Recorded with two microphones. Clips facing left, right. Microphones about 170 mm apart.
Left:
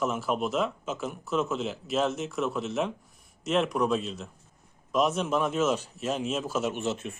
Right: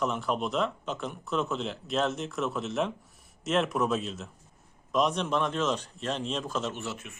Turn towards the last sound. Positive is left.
turn(degrees=25)  # may be behind; listen again after turning